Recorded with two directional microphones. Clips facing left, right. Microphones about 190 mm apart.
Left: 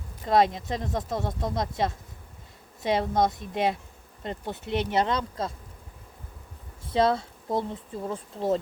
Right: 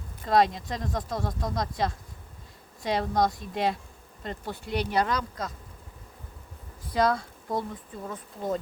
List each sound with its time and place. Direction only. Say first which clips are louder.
0.3 s speech: left 1 dB; 25° left (ahead or behind)
6.8 s speech: left 2 dB; 25° left (ahead or behind)